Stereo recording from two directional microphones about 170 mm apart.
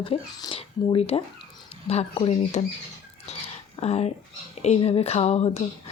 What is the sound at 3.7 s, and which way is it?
Speech, 40° left (ahead or behind).